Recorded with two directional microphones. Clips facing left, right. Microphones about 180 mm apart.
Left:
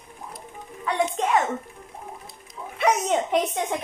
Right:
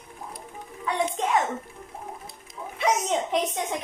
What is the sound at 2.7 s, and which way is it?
Speech, 60° left (ahead or behind).